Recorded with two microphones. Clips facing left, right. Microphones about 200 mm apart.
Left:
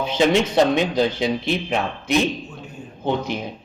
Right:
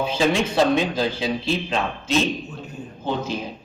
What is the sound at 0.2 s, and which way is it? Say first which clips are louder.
Speech: left 4 dB; 20° left (ahead or behind).